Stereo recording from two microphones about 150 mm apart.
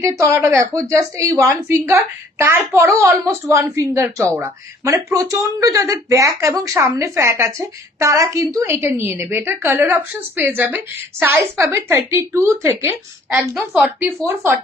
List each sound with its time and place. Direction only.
0.0 s a woman's voice: 20° right (ahead or behind)